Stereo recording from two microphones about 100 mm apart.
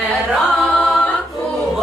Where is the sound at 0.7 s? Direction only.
5° left (ahead or behind).